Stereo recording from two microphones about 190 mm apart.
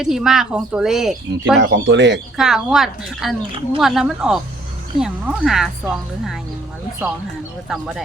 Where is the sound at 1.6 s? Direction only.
70° right (ahead or behind).